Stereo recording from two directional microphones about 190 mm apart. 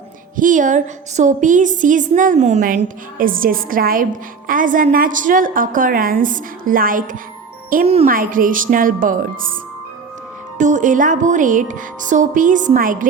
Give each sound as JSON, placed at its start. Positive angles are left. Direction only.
{"t": 0.3, "sound": "a woman's voice", "side_deg": -45}
{"t": 10.6, "sound": "a woman's voice", "side_deg": -40}